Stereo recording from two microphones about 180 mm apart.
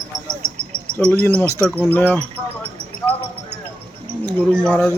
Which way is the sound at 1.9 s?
10° left (ahead or behind).